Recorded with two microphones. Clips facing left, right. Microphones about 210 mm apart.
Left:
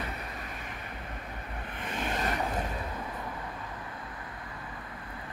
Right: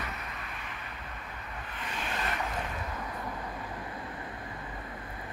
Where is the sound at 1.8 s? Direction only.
50° left (ahead or behind).